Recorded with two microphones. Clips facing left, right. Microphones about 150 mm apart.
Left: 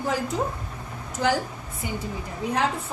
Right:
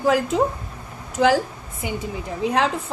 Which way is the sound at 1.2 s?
90° right.